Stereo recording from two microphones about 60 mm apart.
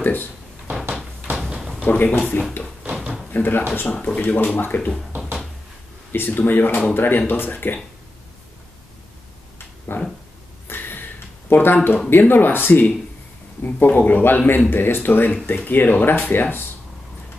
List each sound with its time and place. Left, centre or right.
0.0 s speech: left
1.3 s a sound: centre
1.9 s speech: left
3.0 s door: centre
3.3 s speech: left
6.1 s a man's voice: left
9.9 s a man's voice: left
10.7 s a sound: left
12.1 s a man's voice: left